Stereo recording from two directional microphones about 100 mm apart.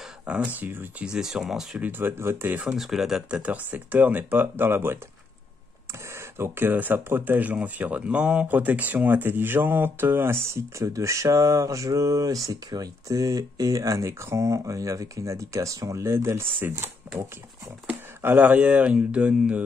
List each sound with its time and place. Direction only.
0.3 s speech: 15° right (ahead or behind)
1.0 s speech: 5° right (ahead or behind)
1.8 s speech: 20° right (ahead or behind)
2.6 s speech: 5° right (ahead or behind); by 4.9 s 20° right (ahead or behind)
6.1 s speech: 25° right (ahead or behind)